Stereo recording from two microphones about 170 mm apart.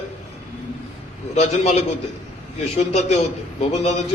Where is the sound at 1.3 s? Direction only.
40° left (ahead or behind).